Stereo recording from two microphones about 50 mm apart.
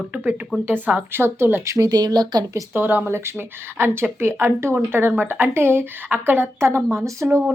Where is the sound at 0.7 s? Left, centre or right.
Right.